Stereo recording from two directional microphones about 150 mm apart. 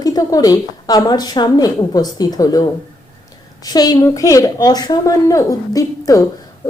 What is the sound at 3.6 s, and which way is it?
A woman's voice, 25° left (ahead or behind).